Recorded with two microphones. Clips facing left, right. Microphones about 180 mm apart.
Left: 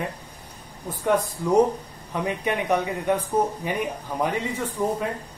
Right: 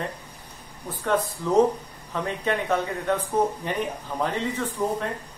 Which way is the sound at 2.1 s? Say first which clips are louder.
Left 1 dB; 15° left (ahead or behind).